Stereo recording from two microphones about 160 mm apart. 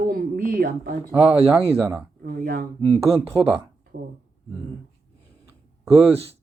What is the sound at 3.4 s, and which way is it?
Speech, 30° right (ahead or behind).